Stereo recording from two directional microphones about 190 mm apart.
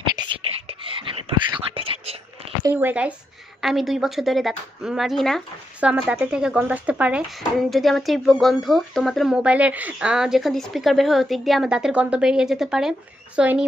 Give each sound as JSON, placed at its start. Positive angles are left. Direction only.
{"t": 0.3, "sound": "whispering", "side_deg": -25}
{"t": 2.6, "sound": "speech", "side_deg": -10}